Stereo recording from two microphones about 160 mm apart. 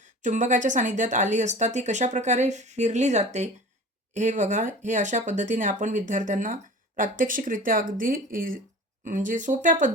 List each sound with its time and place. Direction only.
0.0 s speech: 50° right (ahead or behind)